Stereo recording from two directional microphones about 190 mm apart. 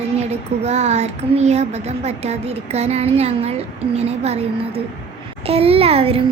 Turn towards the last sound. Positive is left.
turn(degrees=-30)  # may be behind; listen again after turning